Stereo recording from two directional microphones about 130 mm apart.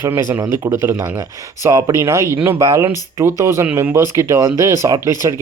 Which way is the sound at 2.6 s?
30° right (ahead or behind).